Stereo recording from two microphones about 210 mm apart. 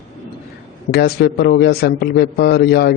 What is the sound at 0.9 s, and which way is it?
A man's voice, 50° left (ahead or behind).